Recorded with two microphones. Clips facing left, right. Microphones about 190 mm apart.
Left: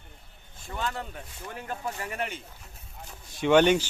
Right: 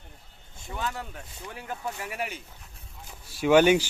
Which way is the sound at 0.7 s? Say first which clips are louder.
Left 1 dB; 10° right (ahead or behind).